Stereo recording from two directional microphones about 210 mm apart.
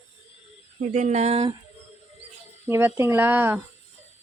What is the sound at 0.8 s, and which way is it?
Speech, 35° right (ahead or behind).